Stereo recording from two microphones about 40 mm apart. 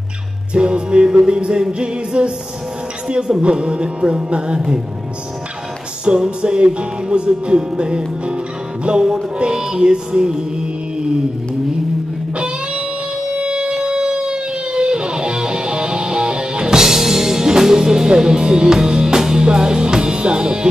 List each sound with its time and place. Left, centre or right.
0.6 s music: right
6.0 s music: right
13.4 s music: right
16.8 s music: centre